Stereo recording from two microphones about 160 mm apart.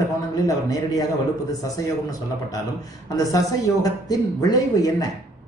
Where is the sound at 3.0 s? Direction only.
20° left (ahead or behind).